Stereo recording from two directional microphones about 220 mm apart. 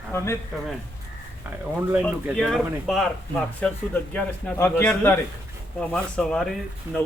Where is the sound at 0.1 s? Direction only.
10° left (ahead or behind).